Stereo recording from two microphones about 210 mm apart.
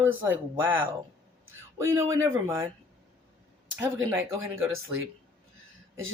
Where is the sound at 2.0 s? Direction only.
15° right (ahead or behind).